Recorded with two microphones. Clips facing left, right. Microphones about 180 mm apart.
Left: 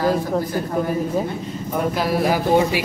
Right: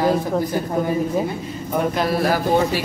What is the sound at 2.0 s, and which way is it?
Speech, 15° left (ahead or behind).